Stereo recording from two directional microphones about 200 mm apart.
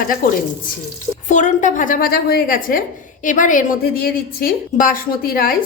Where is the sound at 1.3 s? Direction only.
40° left (ahead or behind).